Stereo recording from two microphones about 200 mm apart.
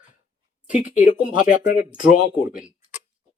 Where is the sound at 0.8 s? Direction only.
10° right (ahead or behind).